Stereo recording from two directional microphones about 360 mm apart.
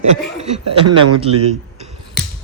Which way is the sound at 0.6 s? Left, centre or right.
Right.